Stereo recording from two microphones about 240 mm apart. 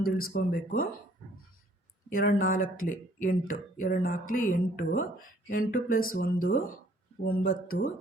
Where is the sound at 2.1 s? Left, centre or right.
Left.